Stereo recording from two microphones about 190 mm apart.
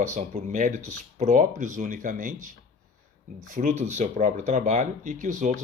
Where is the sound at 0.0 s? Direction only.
40° right (ahead or behind).